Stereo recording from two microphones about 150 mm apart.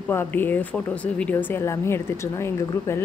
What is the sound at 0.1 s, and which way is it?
A woman's voice, 15° left (ahead or behind).